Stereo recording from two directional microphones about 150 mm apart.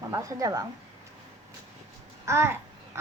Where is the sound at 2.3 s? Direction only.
15° right (ahead or behind).